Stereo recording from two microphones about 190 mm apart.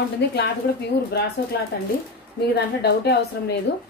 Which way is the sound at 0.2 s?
65° left (ahead or behind).